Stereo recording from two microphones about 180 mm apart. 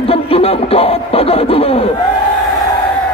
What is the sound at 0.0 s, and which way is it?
Music, 30° left (ahead or behind).